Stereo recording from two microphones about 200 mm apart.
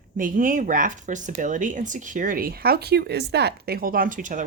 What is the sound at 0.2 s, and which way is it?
Speech, 40° right (ahead or behind).